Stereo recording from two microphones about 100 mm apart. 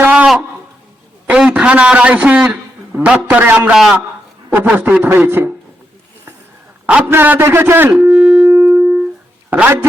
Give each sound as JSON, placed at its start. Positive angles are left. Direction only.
{"t": 0.0, "sound": "a sound", "side_deg": -15}
{"t": 1.3, "sound": "a man's voice", "side_deg": -10}
{"t": 6.8, "sound": "a man's voice", "side_deg": -10}
{"t": 7.1, "sound": "a man's voice", "side_deg": -20}
{"t": 8.2, "sound": "shofar", "side_deg": -10}
{"t": 8.4, "sound": "music", "side_deg": -20}
{"t": 9.5, "sound": "a man's voice", "side_deg": -20}